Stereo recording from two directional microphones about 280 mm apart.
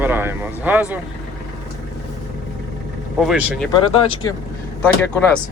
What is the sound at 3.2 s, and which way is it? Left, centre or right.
Speech, centre.